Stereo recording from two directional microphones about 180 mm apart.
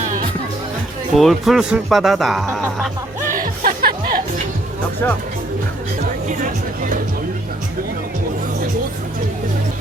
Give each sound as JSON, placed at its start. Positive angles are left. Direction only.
{"t": 1.1, "sound": "speech", "side_deg": 0}
{"t": 3.3, "sound": "music", "side_deg": -50}
{"t": 6.2, "sound": "speech", "side_deg": -45}